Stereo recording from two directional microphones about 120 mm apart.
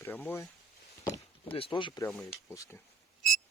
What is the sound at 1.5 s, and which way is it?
Speech, 45° left (ahead or behind).